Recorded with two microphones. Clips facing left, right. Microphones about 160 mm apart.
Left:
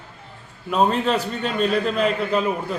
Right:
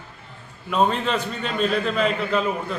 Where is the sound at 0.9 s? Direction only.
35° left (ahead or behind).